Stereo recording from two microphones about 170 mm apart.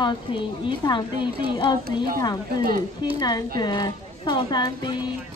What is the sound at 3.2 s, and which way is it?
A woman's voice, 25° left (ahead or behind).